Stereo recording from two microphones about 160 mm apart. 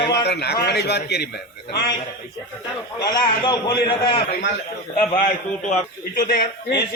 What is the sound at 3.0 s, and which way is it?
Speech, 25° left (ahead or behind).